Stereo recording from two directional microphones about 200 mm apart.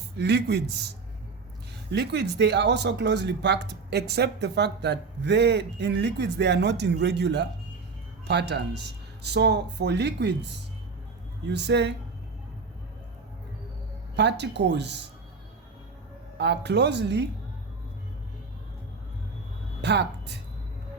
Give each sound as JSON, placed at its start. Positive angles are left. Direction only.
{"t": 0.2, "sound": "speech", "side_deg": -60}
{"t": 1.9, "sound": "speech", "side_deg": -55}
{"t": 14.2, "sound": "speech", "side_deg": -60}
{"t": 16.4, "sound": "speech", "side_deg": -60}
{"t": 19.8, "sound": "a woman's voice", "side_deg": -60}